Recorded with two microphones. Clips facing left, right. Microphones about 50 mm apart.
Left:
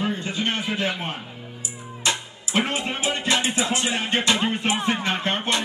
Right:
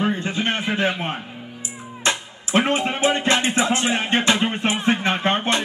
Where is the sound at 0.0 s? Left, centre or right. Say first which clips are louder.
Right 3 dB; right.